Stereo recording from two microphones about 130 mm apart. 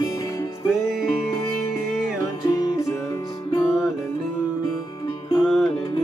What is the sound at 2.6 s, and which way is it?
Music, 25° left (ahead or behind).